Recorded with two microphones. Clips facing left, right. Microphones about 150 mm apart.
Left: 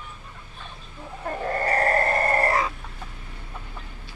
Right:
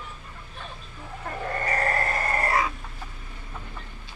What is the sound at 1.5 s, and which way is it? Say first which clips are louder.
Goat: left 4 dB; 35° left (ahead or behind).